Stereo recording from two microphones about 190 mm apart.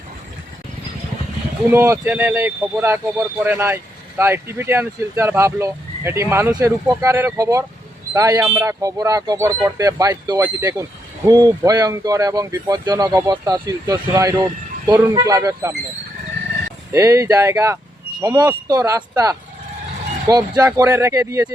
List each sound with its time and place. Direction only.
1.7 s speech: 15° right (ahead or behind)
16.9 s speech: 15° right (ahead or behind)